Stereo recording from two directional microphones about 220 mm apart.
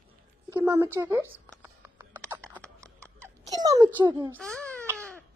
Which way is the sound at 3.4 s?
15° right (ahead or behind).